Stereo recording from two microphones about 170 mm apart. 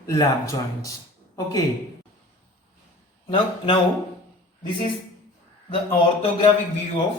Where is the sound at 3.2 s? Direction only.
30° left (ahead or behind).